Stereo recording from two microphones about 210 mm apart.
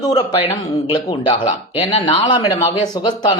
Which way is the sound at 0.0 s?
20° left (ahead or behind).